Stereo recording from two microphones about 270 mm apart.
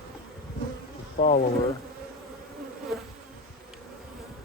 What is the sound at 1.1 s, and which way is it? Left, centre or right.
Speech, left.